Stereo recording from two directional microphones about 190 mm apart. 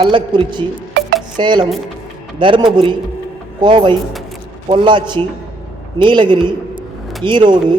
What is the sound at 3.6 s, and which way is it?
A man's voice, 25° right (ahead or behind).